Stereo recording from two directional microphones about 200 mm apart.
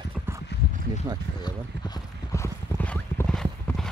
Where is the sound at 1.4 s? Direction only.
20° left (ahead or behind); by 3.9 s centre (ahead or behind).